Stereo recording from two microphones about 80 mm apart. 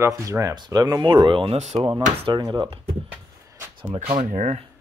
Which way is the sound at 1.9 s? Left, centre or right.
Right.